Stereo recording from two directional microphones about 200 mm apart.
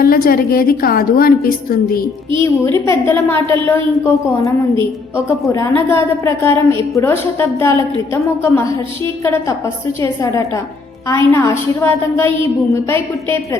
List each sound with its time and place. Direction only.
0.0 s a woman's voice: 45° left (ahead or behind)
2.7 s a woman's voice: 15° left (ahead or behind)
11.1 s a woman's voice: 15° left (ahead or behind)